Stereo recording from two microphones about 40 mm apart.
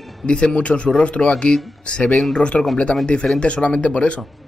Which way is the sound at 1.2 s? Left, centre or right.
Centre.